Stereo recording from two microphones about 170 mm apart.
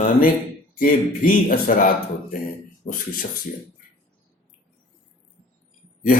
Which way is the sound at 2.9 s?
50° left (ahead or behind).